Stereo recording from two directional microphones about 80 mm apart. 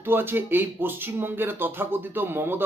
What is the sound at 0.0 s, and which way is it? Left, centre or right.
Speech, right.